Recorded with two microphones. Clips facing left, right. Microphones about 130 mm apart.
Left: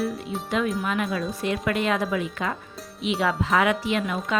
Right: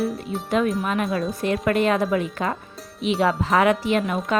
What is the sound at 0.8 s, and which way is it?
Speech, 35° right (ahead or behind).